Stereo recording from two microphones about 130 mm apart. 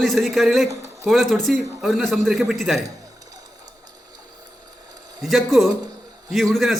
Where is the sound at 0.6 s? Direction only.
25° right (ahead or behind).